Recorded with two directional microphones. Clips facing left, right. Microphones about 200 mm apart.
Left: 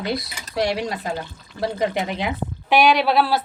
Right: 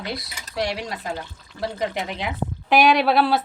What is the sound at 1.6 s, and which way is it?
Speech, 25° left (ahead or behind).